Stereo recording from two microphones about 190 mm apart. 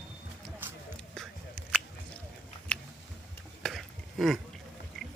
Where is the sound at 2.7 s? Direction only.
5° left (ahead or behind).